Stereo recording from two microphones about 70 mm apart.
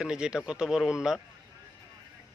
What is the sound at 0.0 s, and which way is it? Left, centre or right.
Speech, centre.